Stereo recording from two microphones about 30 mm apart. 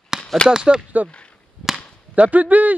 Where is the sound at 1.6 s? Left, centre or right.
Left.